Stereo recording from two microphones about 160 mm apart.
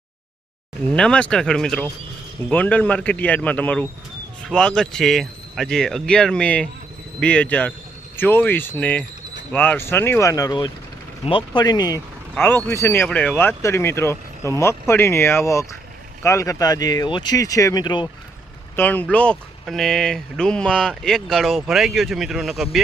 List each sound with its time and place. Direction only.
0.9 s speech: 5° left (ahead or behind); by 18.1 s 30° left (ahead or behind)
18.8 s speech: 10° left (ahead or behind)